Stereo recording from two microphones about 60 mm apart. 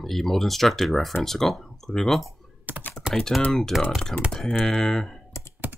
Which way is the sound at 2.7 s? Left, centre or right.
Right.